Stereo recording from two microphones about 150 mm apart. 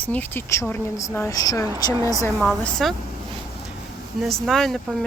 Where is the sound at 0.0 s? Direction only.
10° left (ahead or behind).